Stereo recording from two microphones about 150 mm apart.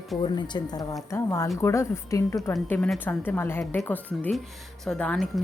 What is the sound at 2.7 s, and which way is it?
A woman's voice, 5° left (ahead or behind).